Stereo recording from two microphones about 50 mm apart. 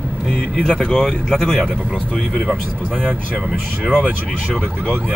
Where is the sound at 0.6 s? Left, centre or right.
Centre.